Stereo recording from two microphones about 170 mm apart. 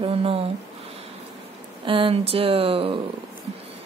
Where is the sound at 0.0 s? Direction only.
35° right (ahead or behind).